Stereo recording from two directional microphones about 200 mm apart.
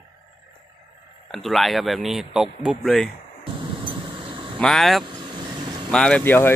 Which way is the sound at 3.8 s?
25° right (ahead or behind).